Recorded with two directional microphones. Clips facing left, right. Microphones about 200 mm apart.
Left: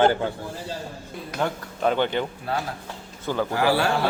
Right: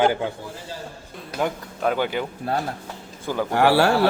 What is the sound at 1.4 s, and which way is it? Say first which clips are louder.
Speech: right 1 dB; 5° right (ahead or behind).